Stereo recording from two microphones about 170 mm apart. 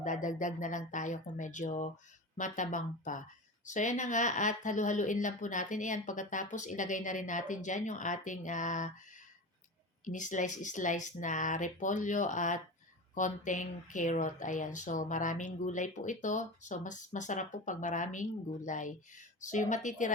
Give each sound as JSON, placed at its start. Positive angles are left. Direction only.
{"t": 0.0, "sound": "speech", "side_deg": 45}
{"t": 10.1, "sound": "speech", "side_deg": 45}